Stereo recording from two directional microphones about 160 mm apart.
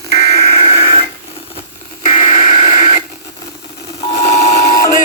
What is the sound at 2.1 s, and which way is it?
Radio, 50° left (ahead or behind).